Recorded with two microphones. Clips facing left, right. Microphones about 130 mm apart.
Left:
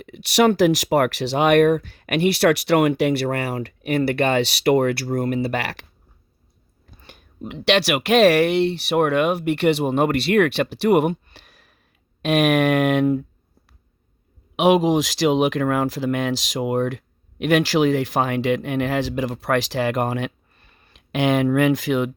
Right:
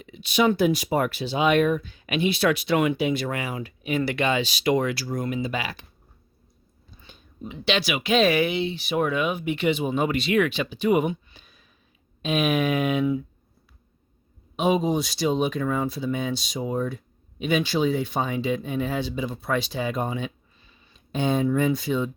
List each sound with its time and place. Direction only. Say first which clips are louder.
0.0 s speech: left 4 dB; 70° left (ahead or behind)
7.0 s speech: left 4 dB; 70° left (ahead or behind)
14.5 s speech: left 6 dB; 90° left